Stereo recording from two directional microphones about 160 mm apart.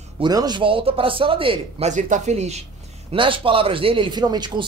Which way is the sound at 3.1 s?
35° right (ahead or behind).